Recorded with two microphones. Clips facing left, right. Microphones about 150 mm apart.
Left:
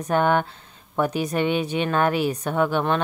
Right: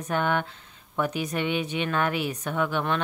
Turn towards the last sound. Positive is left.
turn(degrees=35)  # may be behind; listen again after turning